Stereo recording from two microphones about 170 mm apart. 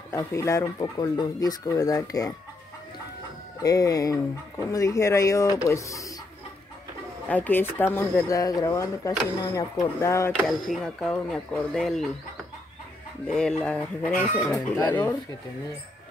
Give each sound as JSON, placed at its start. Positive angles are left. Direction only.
{"t": 0.1, "sound": "speech", "side_deg": 15}
{"t": 3.6, "sound": "speech", "side_deg": 20}
{"t": 7.2, "sound": "speech", "side_deg": 10}
{"t": 10.3, "sound": "speech", "side_deg": 0}
{"t": 13.3, "sound": "speech", "side_deg": 5}